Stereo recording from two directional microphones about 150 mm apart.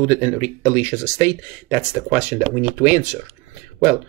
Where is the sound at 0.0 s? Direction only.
10° right (ahead or behind).